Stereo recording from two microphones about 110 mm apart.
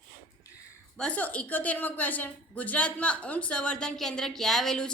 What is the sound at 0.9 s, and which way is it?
A woman's voice, 10° left (ahead or behind).